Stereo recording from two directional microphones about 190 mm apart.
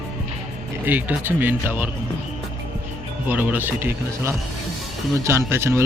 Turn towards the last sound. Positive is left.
turn(degrees=-15)  # may be behind; listen again after turning